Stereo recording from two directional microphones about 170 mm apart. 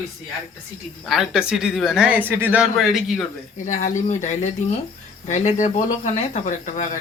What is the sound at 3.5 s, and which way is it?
Speech, 45° left (ahead or behind).